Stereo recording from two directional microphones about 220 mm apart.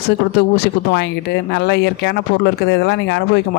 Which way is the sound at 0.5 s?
45° left (ahead or behind).